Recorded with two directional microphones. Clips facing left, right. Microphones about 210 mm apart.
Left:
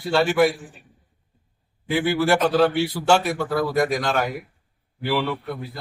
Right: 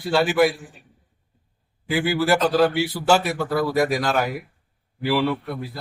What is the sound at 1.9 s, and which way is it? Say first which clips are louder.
A man's voice: even; centre (ahead or behind).